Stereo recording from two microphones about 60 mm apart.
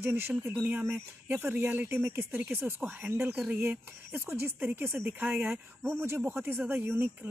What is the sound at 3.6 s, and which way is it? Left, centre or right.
Speech, right.